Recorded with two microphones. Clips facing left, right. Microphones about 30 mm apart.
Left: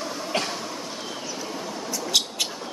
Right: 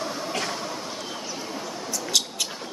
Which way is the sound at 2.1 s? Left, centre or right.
Centre.